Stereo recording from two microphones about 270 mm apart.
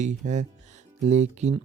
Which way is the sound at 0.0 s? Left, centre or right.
Right.